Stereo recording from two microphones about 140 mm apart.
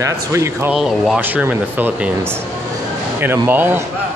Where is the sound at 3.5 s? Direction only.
15° right (ahead or behind).